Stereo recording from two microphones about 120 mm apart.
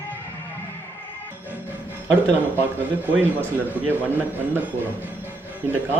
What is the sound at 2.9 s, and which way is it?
Speech, 15° right (ahead or behind).